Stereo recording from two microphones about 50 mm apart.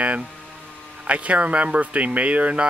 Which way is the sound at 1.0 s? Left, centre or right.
Right.